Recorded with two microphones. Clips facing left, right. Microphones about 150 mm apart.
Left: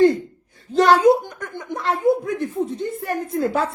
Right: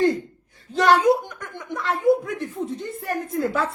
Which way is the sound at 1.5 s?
30° left (ahead or behind).